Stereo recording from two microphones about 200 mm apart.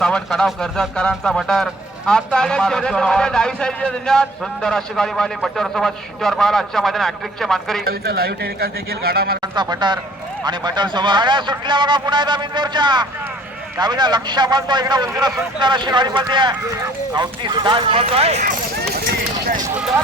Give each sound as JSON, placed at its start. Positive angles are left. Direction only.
{"t": 0.0, "sound": "speech", "side_deg": 5}
{"t": 7.9, "sound": "a man's voice", "side_deg": -50}
{"t": 9.4, "sound": "speech", "side_deg": -20}
{"t": 18.8, "sound": "a sound", "side_deg": -55}
{"t": 19.6, "sound": "speech", "side_deg": -5}